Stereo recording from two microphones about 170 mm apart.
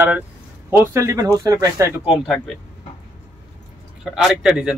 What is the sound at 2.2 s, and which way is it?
Speech, 5° left (ahead or behind).